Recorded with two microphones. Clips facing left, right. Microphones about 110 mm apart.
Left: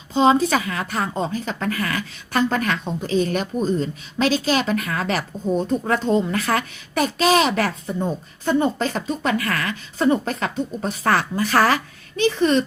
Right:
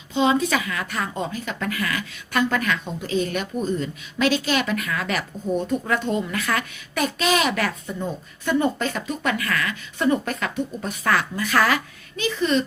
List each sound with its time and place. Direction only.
0.1 s a child's voice: 35° left (ahead or behind)